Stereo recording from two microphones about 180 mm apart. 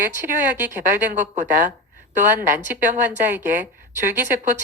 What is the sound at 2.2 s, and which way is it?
Speech, 10° right (ahead or behind).